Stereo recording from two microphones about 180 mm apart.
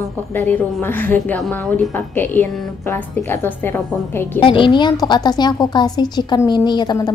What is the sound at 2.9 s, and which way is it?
A woman's voice, 10° left (ahead or behind).